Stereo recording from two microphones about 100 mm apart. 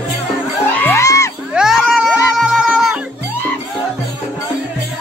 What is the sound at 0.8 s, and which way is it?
Music, 30° left (ahead or behind).